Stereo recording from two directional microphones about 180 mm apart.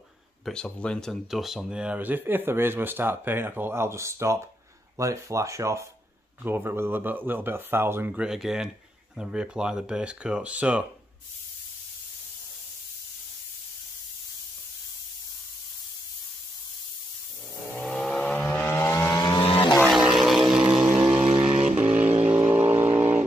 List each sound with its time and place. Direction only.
0.5 s speech: 5° left (ahead or behind)
17.7 s vehicle: 5° left (ahead or behind); by 19.4 s 20° left (ahead or behind)
19.4 s vehicle: 30° left (ahead or behind)
20.2 s vehicle: centre (ahead or behind)